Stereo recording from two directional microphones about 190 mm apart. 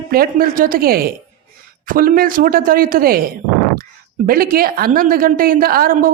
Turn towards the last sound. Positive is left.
turn(degrees=-50)  # may be behind; listen again after turning